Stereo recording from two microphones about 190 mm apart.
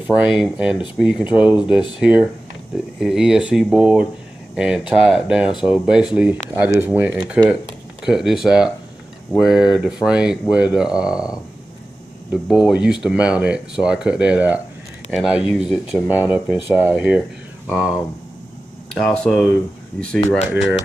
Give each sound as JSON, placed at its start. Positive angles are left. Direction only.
{"t": 0.0, "sound": "speech", "side_deg": -5}